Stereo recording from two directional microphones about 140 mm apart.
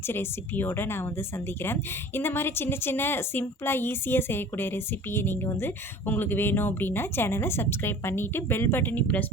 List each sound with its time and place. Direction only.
0.1 s a woman's voice: 15° left (ahead or behind)